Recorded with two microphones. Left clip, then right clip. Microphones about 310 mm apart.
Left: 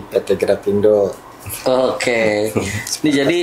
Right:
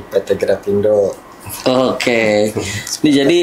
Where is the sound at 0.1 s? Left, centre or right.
Left.